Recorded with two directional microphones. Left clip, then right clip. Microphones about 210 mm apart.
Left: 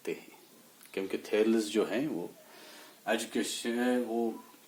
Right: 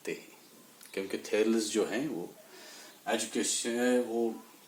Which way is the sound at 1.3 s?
30° left (ahead or behind).